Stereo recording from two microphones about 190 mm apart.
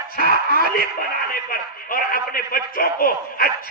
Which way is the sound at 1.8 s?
50° left (ahead or behind).